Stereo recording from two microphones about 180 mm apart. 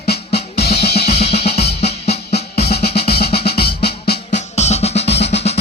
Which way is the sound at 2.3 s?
65° left (ahead or behind).